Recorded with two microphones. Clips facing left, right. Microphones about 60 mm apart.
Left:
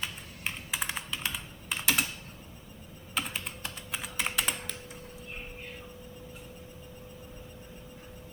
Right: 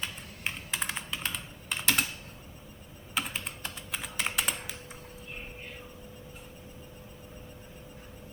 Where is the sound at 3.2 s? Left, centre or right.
Centre.